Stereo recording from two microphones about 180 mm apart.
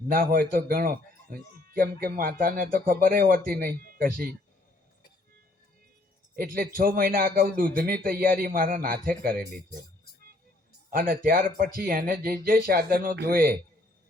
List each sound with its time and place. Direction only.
0.1 s speech: 50° right (ahead or behind)
6.3 s speech: 55° right (ahead or behind)
10.9 s speech: 50° right (ahead or behind)